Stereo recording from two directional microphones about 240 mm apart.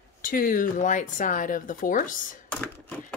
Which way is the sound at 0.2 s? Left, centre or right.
Left.